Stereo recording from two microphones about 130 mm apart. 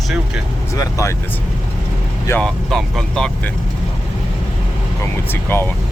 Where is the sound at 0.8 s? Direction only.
25° left (ahead or behind).